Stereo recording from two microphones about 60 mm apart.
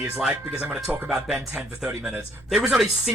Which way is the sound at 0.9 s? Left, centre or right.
Centre.